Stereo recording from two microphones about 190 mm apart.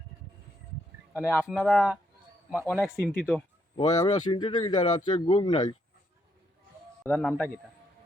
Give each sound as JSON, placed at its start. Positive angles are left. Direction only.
{"t": 1.1, "sound": "a man's voice", "side_deg": 10}
{"t": 3.8, "sound": "speech", "side_deg": 20}
{"t": 7.0, "sound": "a man's voice", "side_deg": 5}